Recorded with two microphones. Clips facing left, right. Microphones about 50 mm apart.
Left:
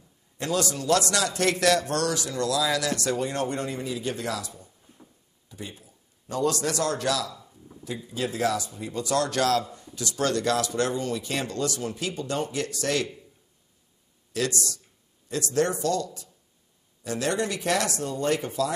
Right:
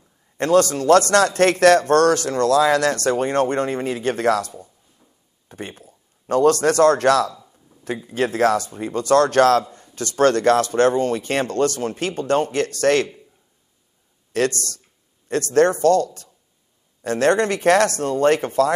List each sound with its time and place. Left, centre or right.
0.4 s a man's voice: right
4.9 s a sound: left
5.5 s a man's voice: right
14.3 s a man's voice: right